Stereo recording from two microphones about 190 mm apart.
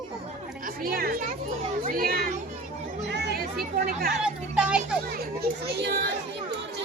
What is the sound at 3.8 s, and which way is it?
Speech, 50° right (ahead or behind).